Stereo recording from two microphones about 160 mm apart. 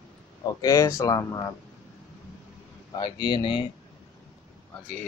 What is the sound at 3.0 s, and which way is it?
Speech, 30° left (ahead or behind).